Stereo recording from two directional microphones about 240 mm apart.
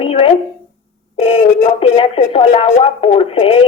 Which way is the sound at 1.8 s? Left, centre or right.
Left.